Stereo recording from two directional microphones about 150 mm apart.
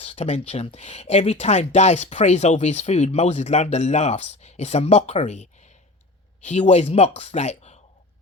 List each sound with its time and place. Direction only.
0.0 s speech: 45° left (ahead or behind)